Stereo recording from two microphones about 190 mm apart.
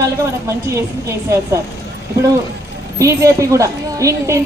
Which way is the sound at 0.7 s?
15° right (ahead or behind).